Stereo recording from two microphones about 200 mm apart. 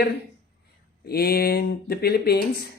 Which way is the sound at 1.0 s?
50° left (ahead or behind).